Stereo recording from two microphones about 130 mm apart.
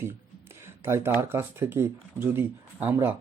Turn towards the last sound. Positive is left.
turn(degrees=-15)  # may be behind; listen again after turning